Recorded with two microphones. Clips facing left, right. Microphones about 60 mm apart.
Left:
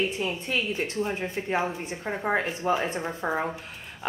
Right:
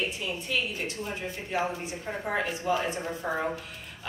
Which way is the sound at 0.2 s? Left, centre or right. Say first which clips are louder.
Left 3 dB; left.